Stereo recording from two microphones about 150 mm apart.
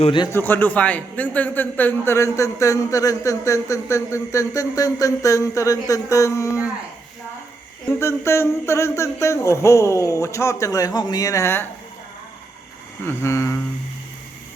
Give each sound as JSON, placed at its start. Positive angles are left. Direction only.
{"t": 0.0, "sound": "a man's voice", "side_deg": 35}
{"t": 0.3, "sound": "a man's voice", "side_deg": 15}
{"t": 7.9, "sound": "a man's voice", "side_deg": 15}
{"t": 13.1, "sound": "mantra", "side_deg": 20}